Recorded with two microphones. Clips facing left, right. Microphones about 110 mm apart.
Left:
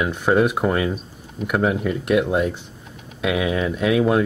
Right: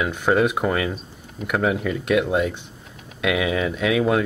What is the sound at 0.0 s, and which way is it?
Speech, centre (ahead or behind).